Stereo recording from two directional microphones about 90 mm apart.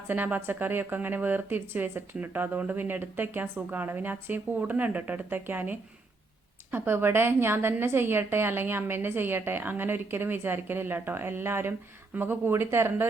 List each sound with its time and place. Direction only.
0.1 s speech: 20° right (ahead or behind)